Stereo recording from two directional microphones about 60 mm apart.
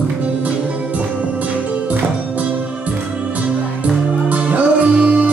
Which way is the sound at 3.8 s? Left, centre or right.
Right.